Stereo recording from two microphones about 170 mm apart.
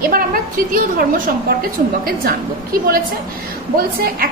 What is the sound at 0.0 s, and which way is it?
A woman's voice, 55° right (ahead or behind).